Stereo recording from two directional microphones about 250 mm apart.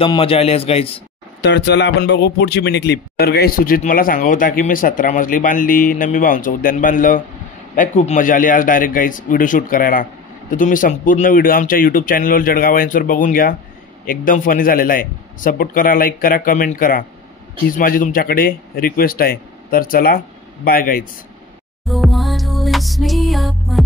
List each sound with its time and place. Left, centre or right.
0.0 s a man's voice: left
1.4 s speech: left
21.8 s music: centre